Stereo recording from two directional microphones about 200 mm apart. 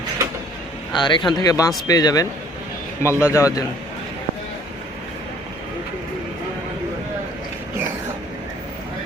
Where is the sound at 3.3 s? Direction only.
15° left (ahead or behind).